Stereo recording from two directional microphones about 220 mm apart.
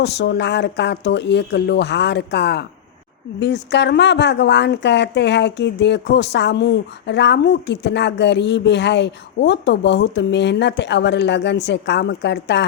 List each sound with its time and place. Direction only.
0.0 s speech: 50° left (ahead or behind)